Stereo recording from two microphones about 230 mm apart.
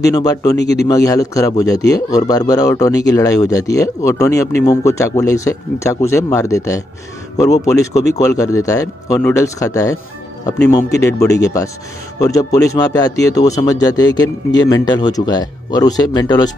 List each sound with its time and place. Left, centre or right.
0.0 s a man's voice: centre
0.6 s a man's voice: left
0.8 s a man's voice: centre
11.0 s a man's voice: centre